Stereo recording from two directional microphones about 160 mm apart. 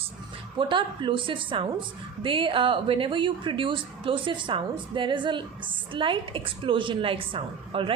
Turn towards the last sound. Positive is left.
turn(degrees=-35)  # may be behind; listen again after turning